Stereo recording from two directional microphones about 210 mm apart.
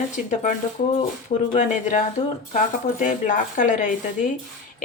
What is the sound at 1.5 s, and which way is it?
Speech, 35° left (ahead or behind).